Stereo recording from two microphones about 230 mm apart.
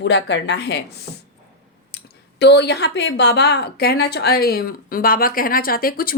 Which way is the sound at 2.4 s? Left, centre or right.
Left.